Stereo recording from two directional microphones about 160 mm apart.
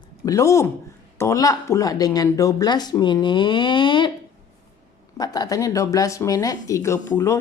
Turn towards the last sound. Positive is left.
turn(degrees=15)  # may be behind; listen again after turning